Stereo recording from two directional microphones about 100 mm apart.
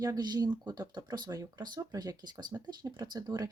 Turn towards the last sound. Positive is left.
turn(degrees=-40)  # may be behind; listen again after turning